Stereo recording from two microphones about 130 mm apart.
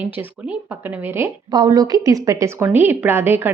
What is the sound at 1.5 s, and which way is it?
A woman's voice, 35° right (ahead or behind).